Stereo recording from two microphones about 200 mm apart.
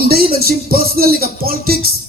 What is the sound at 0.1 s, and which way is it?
Music, 50° right (ahead or behind).